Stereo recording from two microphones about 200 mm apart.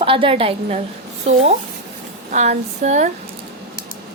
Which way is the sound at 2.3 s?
35° right (ahead or behind).